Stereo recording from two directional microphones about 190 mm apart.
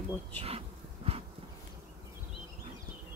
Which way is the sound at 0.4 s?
30° right (ahead or behind).